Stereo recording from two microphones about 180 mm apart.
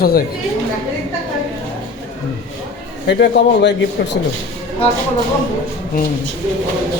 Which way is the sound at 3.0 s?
70° left (ahead or behind).